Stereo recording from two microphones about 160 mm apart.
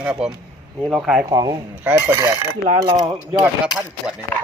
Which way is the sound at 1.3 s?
25° right (ahead or behind).